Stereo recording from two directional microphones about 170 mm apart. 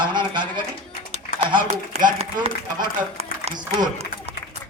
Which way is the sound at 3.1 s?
40° right (ahead or behind).